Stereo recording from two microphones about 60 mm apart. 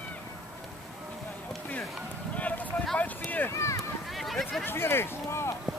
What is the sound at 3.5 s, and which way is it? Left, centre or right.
Speech, left.